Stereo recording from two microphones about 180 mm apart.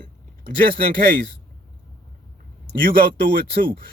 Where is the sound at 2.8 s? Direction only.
55° right (ahead or behind).